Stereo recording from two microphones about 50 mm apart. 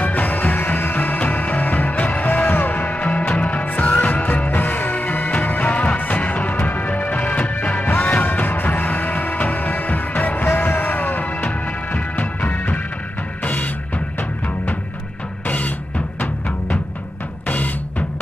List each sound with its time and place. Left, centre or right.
0.0 s music: left
15.4 s music: left